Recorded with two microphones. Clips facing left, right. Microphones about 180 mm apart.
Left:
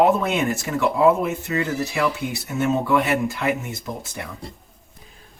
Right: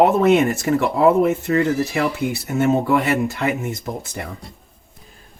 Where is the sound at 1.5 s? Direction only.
50° right (ahead or behind).